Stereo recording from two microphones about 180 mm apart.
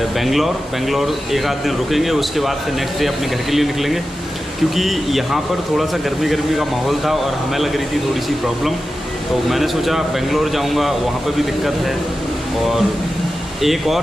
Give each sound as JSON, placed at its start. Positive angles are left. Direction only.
{"t": 0.2, "sound": "speech", "side_deg": 0}
{"t": 3.5, "sound": "speech", "side_deg": 0}
{"t": 9.5, "sound": "speech", "side_deg": 0}
{"t": 13.6, "sound": "speech", "side_deg": 0}